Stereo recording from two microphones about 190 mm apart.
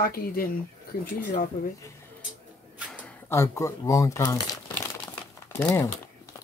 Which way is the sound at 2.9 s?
10° left (ahead or behind).